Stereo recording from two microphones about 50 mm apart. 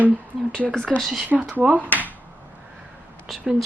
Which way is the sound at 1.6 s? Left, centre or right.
Right.